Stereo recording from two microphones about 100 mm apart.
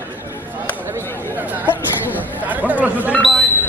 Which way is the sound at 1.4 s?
15° right (ahead or behind).